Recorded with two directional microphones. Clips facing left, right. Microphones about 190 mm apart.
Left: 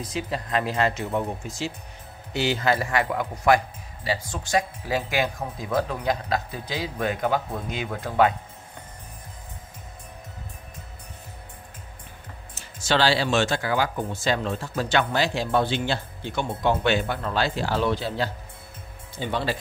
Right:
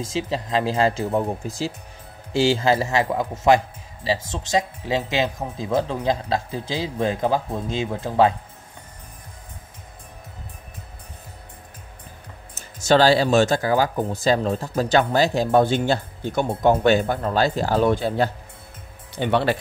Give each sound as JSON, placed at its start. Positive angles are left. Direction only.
{"t": 0.0, "sound": "a man's voice", "side_deg": -25}
{"t": 12.8, "sound": "speech", "side_deg": -45}
{"t": 19.1, "sound": "speech", "side_deg": -65}